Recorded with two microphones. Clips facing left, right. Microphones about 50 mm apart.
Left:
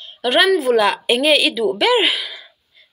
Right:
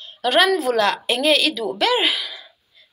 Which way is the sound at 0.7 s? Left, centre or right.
Centre.